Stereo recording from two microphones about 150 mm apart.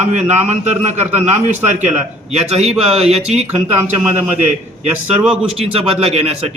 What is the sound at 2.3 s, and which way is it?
A man's voice, 45° right (ahead or behind).